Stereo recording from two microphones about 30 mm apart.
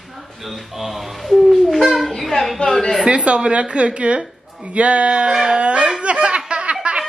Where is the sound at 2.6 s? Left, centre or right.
Left.